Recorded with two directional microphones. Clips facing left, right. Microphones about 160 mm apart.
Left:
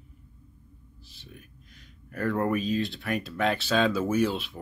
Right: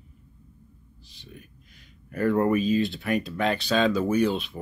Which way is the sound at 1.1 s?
Centre (ahead or behind).